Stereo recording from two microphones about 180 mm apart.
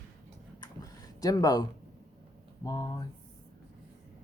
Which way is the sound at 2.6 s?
20° left (ahead or behind).